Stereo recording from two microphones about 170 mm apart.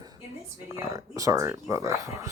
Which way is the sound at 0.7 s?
20° right (ahead or behind).